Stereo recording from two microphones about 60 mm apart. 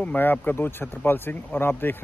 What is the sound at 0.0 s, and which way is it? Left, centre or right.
Speech, left.